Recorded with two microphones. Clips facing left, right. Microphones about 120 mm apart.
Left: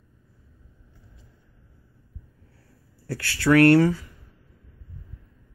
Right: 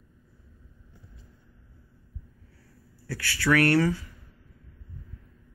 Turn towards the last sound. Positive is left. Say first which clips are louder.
# left 6 dB
turn(degrees=20)  # may be behind; listen again after turning